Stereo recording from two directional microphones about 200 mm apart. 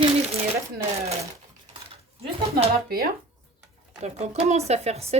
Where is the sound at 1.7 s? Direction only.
35° right (ahead or behind).